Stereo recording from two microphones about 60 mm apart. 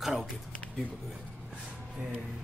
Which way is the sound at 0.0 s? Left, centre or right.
Centre.